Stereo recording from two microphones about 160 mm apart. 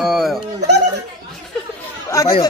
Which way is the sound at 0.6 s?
90° right.